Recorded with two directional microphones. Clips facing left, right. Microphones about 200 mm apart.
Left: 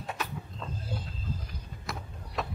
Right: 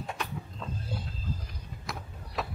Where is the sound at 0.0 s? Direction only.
5° left (ahead or behind).